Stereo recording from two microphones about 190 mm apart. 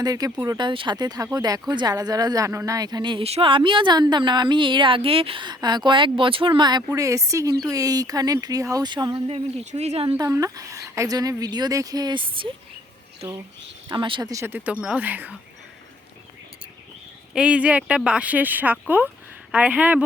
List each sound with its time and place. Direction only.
0.0 s speech: 20° right (ahead or behind)
0.5 s speech: 25° right (ahead or behind)
10.2 s speech: 20° right (ahead or behind)
13.8 s speech: 25° right (ahead or behind); by 15.4 s 10° right (ahead or behind)
17.3 s speech: 5° right (ahead or behind)